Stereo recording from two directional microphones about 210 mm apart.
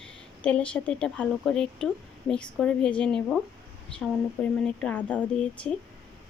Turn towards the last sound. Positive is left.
turn(degrees=5)  # may be behind; listen again after turning